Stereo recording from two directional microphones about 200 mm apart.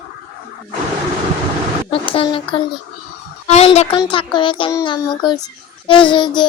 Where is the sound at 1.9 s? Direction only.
25° left (ahead or behind).